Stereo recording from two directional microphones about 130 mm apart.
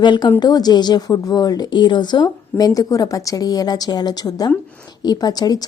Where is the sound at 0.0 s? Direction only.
35° left (ahead or behind).